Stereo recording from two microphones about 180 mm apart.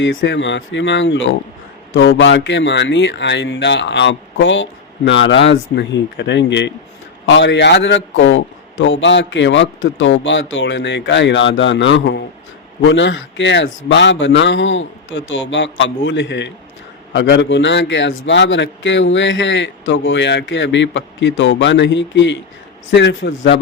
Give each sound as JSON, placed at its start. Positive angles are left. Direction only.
{"t": 0.0, "sound": "a man's voice", "side_deg": 90}
{"t": 5.7, "sound": "a man's voice", "side_deg": 75}